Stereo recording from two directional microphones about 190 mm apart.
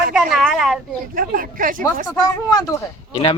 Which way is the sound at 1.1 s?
45° right (ahead or behind).